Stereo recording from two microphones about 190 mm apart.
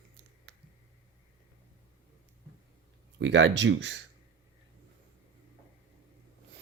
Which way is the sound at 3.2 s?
75° right (ahead or behind).